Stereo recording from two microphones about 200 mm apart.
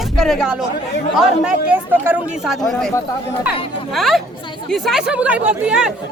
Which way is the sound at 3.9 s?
Centre (ahead or behind).